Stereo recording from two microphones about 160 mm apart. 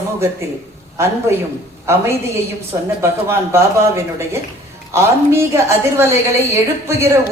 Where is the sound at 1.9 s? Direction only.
15° right (ahead or behind).